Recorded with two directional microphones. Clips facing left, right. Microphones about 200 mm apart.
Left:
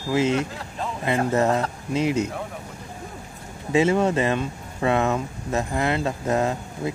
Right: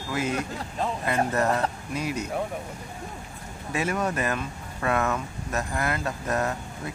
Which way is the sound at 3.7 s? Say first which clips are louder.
Left 8 dB; 25° left (ahead or behind).